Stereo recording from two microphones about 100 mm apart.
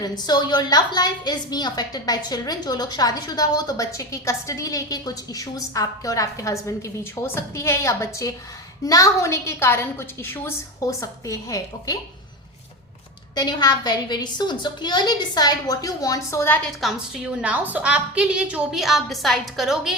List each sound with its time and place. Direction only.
0.0 s a woman's voice: 45° left (ahead or behind); by 10.9 s 25° left (ahead or behind)
11.0 s a woman's voice: 35° left (ahead or behind)
13.3 s a woman's voice: 45° left (ahead or behind); by 16.6 s 25° left (ahead or behind)
16.8 s a woman's voice: centre (ahead or behind)
17.3 s a woman's voice: 15° right (ahead or behind)